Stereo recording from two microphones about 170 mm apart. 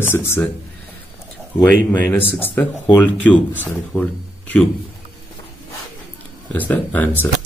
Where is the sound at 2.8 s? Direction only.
25° left (ahead or behind).